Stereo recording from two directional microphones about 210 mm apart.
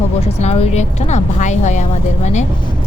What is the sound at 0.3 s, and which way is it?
Speech, 30° left (ahead or behind).